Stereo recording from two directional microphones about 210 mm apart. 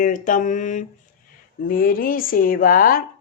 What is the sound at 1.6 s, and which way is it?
Speech, 40° left (ahead or behind).